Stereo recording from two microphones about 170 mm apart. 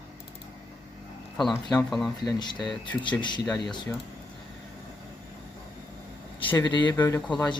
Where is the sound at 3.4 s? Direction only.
5° left (ahead or behind).